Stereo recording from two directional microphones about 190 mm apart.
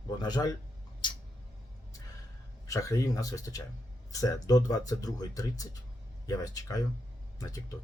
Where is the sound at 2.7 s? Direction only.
15° left (ahead or behind).